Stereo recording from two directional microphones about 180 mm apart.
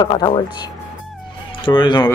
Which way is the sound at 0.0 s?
25° left (ahead or behind).